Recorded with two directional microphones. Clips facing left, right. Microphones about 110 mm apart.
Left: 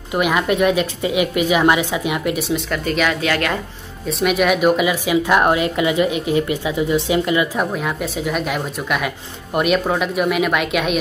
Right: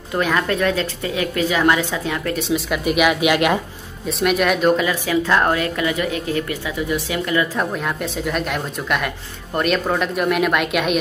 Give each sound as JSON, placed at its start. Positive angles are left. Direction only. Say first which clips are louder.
{"t": 0.1, "sound": "a woman's voice", "louder": "left 2 dB", "side_deg": 15}
{"t": 2.4, "sound": "speech", "louder": "right 1 dB", "side_deg": -5}
{"t": 4.2, "sound": "a woman's voice", "louder": "left 1 dB", "side_deg": 5}
{"t": 7.5, "sound": "speech", "louder": "left 1 dB", "side_deg": 5}